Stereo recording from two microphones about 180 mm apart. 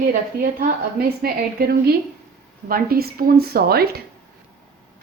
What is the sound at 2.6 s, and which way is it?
A woman's voice, 55° right (ahead or behind).